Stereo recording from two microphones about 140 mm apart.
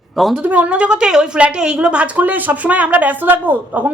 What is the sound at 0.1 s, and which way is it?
Speech, centre (ahead or behind).